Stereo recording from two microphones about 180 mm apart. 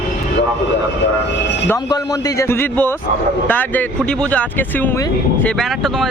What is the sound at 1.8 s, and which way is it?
Speech, 20° left (ahead or behind).